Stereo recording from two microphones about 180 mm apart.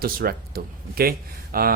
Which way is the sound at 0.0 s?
55° right (ahead or behind).